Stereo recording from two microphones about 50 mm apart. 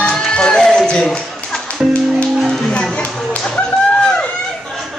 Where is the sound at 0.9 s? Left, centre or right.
Left.